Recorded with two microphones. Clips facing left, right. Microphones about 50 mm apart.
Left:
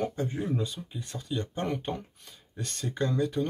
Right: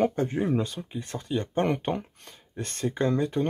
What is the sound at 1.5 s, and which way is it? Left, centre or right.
Speech, right.